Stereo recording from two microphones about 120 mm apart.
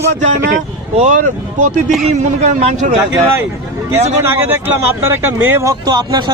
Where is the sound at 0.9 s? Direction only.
80° right.